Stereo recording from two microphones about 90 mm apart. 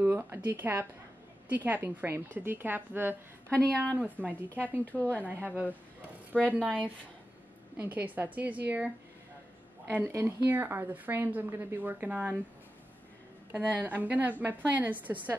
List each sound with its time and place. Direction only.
0.0 s a woman's voice: 25° right (ahead or behind)
3.5 s speech: 15° left (ahead or behind)
4.0 s a woman's voice: 15° right (ahead or behind)
13.5 s a woman's voice: 15° right (ahead or behind)